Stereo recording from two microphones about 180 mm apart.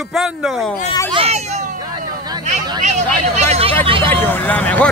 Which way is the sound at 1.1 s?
30° right (ahead or behind).